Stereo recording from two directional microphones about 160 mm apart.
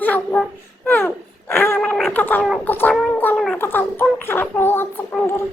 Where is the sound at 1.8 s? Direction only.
Centre (ahead or behind).